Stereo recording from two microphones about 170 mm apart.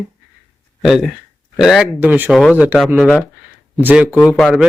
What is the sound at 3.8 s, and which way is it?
Speech, 10° right (ahead or behind).